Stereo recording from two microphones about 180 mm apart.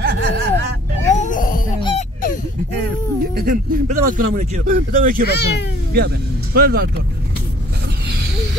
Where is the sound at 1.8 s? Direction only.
30° left (ahead or behind).